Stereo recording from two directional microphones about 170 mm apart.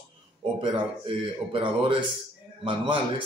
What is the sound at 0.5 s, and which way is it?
Speech, 30° right (ahead or behind).